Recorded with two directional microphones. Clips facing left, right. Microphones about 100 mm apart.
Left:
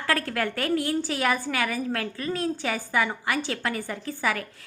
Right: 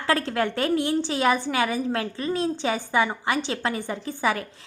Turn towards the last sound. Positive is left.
turn(degrees=-25)  # may be behind; listen again after turning